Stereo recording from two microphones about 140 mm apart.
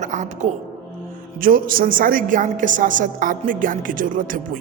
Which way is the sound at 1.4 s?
90° right.